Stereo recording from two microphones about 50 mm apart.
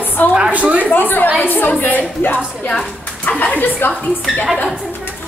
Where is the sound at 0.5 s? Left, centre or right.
Right.